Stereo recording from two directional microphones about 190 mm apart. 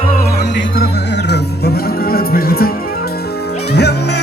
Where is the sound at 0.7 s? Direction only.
60° left (ahead or behind).